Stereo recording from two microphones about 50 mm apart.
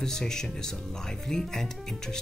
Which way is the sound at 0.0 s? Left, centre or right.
Centre.